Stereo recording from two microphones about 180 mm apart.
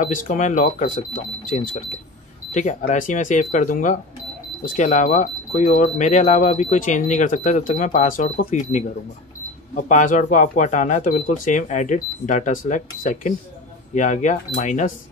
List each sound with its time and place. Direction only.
0.0 s speech: 45° left (ahead or behind)